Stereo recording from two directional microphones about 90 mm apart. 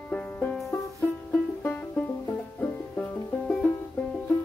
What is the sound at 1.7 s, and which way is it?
Music, 15° left (ahead or behind).